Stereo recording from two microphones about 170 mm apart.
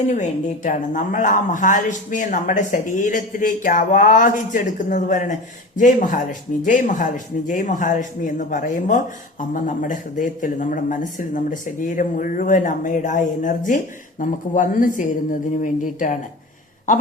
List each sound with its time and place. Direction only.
0.1 s speech: 45° left (ahead or behind)